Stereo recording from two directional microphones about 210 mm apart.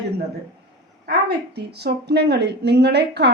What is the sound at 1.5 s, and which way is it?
A woman's voice, 50° right (ahead or behind).